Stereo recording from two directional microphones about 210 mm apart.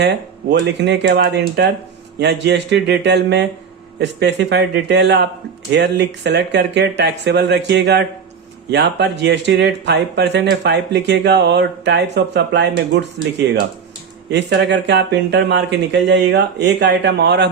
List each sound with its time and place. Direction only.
0.6 s speech: 55° right (ahead or behind)